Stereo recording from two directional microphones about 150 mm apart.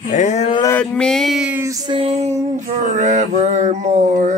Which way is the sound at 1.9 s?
40° right (ahead or behind).